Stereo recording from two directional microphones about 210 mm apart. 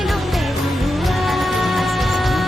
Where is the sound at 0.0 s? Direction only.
Centre (ahead or behind).